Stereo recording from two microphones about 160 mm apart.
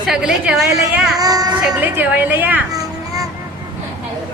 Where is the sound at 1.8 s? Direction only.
10° right (ahead or behind).